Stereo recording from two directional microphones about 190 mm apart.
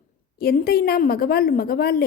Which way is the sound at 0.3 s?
55° left (ahead or behind).